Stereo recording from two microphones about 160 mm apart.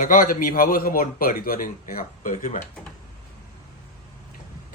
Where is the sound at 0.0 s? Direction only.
55° left (ahead or behind).